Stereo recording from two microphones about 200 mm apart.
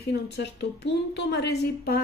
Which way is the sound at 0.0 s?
55° left (ahead or behind).